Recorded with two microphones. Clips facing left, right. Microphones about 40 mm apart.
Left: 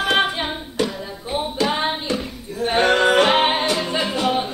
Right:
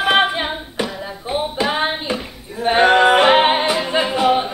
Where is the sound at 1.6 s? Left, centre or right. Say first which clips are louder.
Even; centre.